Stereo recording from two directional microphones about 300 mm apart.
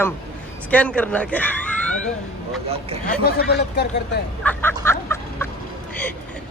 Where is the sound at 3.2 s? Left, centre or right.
Left.